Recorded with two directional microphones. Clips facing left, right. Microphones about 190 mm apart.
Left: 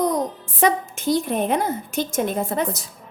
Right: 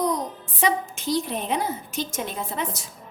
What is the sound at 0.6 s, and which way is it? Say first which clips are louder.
A woman's voice: left 4 dB; 50° left (ahead or behind).